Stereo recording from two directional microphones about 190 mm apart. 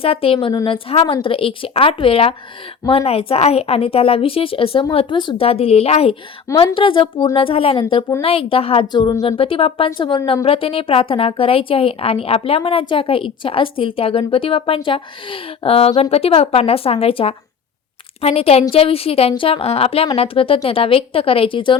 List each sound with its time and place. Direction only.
0.0 s a woman's voice: 30° left (ahead or behind)
6.5 s a woman's voice: 15° left (ahead or behind)
6.7 s a woman's voice: 25° left (ahead or behind)
9.4 s a woman's voice: 30° left (ahead or behind)